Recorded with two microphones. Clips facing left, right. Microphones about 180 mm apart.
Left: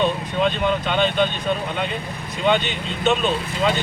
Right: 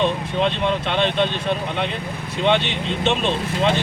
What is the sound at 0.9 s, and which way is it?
Speech, centre (ahead or behind).